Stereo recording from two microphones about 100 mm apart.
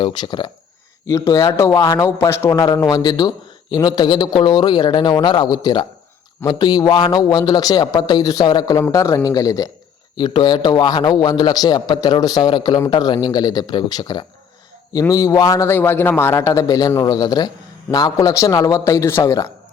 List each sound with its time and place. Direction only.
0.0 s a man's voice: 50° left (ahead or behind)
1.0 s a man's voice: 30° left (ahead or behind)
10.2 s a man's voice: 50° left (ahead or behind)
15.0 s a man's voice: 35° left (ahead or behind)
15.6 s a man's voice: 20° left (ahead or behind)